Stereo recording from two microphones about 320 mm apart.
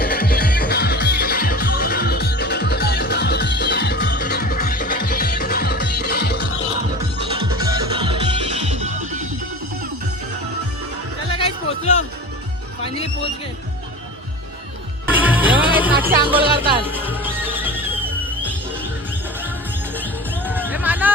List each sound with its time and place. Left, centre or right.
0.0 s music: left
7.2 s music: centre
11.3 s music: centre
15.0 s music: centre
16.1 s music: centre
20.0 s music: centre